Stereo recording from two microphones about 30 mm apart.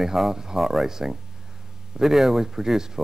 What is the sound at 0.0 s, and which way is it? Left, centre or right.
Speech, centre.